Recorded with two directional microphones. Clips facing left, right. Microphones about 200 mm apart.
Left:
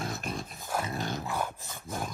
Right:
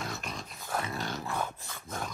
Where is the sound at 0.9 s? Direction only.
50° left (ahead or behind).